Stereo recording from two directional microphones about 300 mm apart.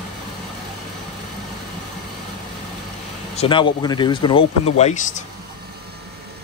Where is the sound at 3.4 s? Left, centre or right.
Centre.